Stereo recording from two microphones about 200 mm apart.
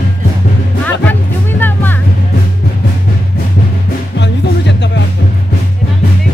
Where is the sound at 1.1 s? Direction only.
10° left (ahead or behind).